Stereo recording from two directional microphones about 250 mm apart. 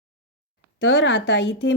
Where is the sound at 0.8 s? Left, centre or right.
Left.